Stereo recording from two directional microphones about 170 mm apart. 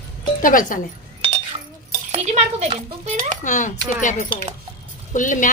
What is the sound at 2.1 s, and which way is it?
Speech, 35° right (ahead or behind).